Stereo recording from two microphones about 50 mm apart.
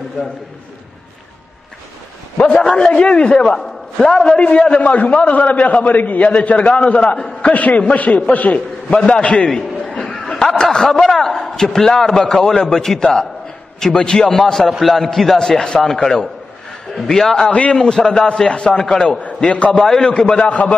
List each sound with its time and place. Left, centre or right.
2.3 s a man's voice: left
2.6 s a man's voice: centre; by 9.1 s left
9.1 s a man's voice: centre
9.5 s a sound: centre
10.2 s snicker: centre
10.6 s a man's voice: centre
14.7 s a man's voice: centre
17.5 s a man's voice: left
17.7 s a man's voice: centre
19.5 s a man's voice: left
19.8 s a man's voice: centre